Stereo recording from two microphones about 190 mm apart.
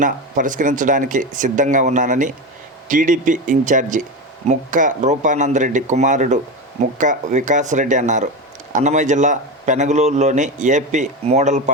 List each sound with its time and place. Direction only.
0.0 s a man's voice: 45° right (ahead or behind)